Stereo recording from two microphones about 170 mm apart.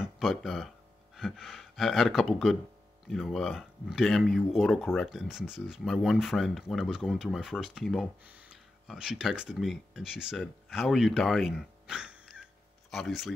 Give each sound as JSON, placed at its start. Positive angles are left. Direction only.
{"t": 0.2, "sound": "speech", "side_deg": 0}